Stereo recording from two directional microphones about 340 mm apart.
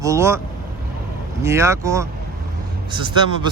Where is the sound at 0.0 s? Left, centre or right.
Centre.